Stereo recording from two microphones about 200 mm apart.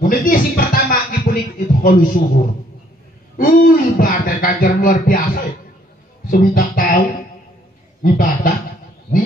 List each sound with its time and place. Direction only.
0.0 s a sound: 45° left (ahead or behind)
3.3 s speech: 45° left (ahead or behind)
8.0 s speech: 45° left (ahead or behind)